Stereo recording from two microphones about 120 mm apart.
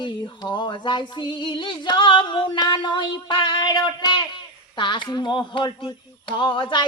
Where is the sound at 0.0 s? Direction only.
40° left (ahead or behind).